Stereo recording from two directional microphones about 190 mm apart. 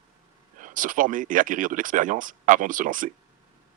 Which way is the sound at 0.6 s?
45° right (ahead or behind).